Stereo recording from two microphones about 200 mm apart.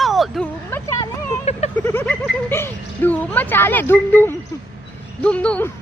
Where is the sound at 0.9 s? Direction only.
30° left (ahead or behind).